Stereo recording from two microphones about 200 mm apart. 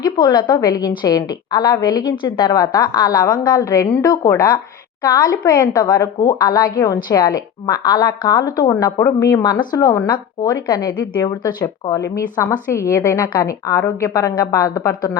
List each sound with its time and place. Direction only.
0.0 s a woman's voice: 20° left (ahead or behind)